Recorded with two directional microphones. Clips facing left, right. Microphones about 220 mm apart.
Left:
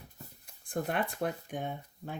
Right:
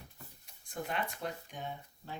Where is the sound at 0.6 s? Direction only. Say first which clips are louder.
Left 5 dB; 55° left (ahead or behind).